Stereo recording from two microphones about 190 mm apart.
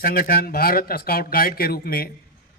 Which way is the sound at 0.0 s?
45° left (ahead or behind).